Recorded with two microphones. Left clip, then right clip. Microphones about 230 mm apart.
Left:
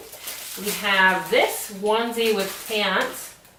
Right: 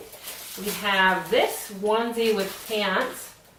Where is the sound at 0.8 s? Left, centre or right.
Centre.